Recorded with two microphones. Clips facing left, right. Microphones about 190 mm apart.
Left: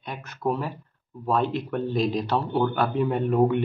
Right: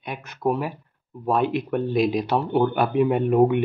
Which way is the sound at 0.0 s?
15° right (ahead or behind).